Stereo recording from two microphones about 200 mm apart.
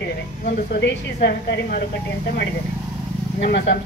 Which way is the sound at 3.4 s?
50° left (ahead or behind).